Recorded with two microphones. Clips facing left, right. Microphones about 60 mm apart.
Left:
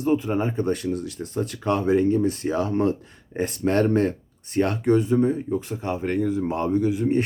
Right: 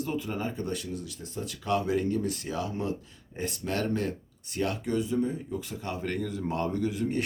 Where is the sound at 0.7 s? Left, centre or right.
Left.